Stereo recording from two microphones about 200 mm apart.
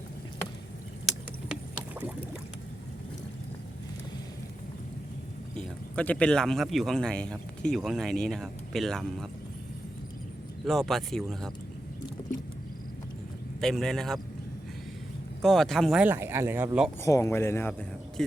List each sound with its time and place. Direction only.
5.5 s speech: 5° left (ahead or behind)
10.7 s speech: centre (ahead or behind)
13.6 s speech: centre (ahead or behind)
15.4 s speech: centre (ahead or behind)
17.0 s speech: 15° left (ahead or behind)